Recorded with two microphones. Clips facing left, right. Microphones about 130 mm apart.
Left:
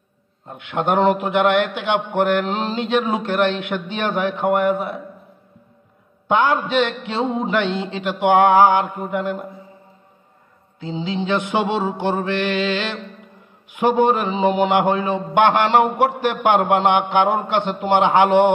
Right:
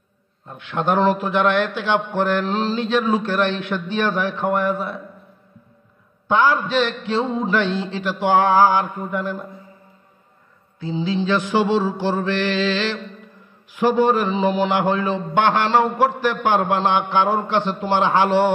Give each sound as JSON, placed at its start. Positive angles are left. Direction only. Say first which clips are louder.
{"t": 0.5, "sound": "a man's voice", "louder": "left 1 dB", "side_deg": 20}
{"t": 6.2, "sound": "a man's voice", "louder": "even", "side_deg": 20}
{"t": 10.8, "sound": "a man's voice", "louder": "right 2 dB", "side_deg": 20}